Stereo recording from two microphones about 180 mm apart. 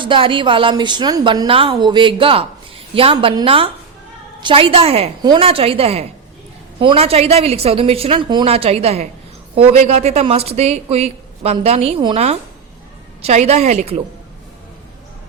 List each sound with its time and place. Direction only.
0.0 s a woman's voice: 30° right (ahead or behind)